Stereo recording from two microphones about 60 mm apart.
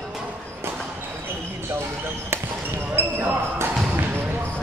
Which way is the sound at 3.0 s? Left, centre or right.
Right.